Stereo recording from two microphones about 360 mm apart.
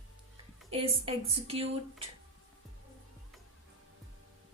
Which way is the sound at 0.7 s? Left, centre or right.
Centre.